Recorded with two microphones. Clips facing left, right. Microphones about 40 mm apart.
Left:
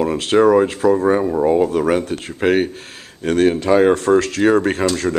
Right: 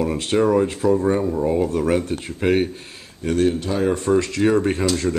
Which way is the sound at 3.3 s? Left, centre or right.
Left.